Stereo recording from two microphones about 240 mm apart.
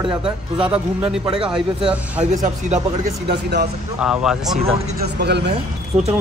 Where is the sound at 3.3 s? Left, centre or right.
Right.